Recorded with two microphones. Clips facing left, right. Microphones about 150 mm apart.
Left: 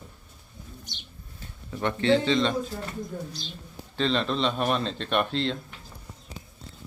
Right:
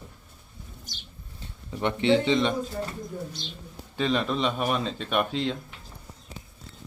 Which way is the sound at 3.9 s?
10° right (ahead or behind).